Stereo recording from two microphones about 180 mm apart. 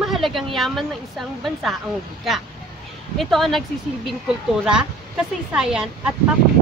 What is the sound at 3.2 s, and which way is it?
A woman's voice, centre (ahead or behind).